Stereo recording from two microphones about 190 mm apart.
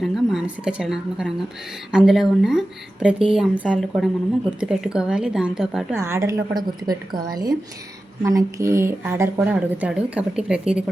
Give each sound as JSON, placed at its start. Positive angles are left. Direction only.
{"t": 0.0, "sound": "speech", "side_deg": 0}
{"t": 6.0, "sound": "a woman's voice", "side_deg": -15}